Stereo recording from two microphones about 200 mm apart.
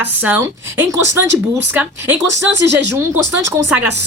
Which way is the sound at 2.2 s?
65° right (ahead or behind).